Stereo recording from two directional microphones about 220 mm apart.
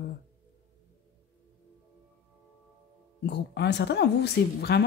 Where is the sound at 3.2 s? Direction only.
50° left (ahead or behind).